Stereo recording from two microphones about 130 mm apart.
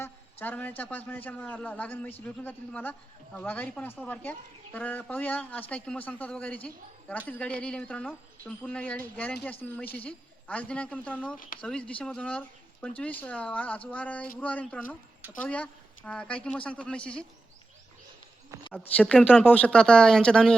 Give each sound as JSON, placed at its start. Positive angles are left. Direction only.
{"t": 0.0, "sound": "speech", "side_deg": 15}
{"t": 11.3, "sound": "speech", "side_deg": 90}
{"t": 11.6, "sound": "speech", "side_deg": 5}
{"t": 18.7, "sound": "speech", "side_deg": 10}